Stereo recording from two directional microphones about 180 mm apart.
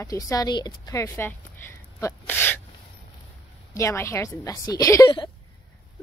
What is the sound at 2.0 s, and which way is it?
Sneeze, 15° left (ahead or behind).